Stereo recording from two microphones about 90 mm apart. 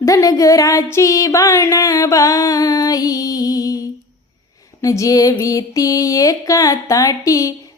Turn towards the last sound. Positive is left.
turn(degrees=40)  # may be behind; listen again after turning